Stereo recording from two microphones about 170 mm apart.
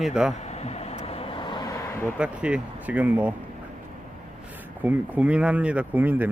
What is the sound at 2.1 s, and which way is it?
Speech, 5° right (ahead or behind).